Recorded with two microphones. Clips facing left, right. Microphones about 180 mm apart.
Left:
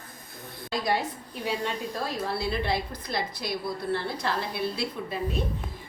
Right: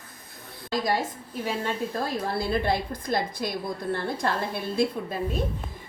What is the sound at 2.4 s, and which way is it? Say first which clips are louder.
A woman's voice: right 5 dB; 50° right (ahead or behind).